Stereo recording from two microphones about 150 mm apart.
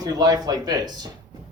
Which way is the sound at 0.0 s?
25° right (ahead or behind).